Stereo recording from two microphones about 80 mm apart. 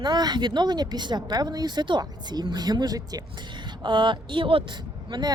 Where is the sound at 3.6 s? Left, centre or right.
Right.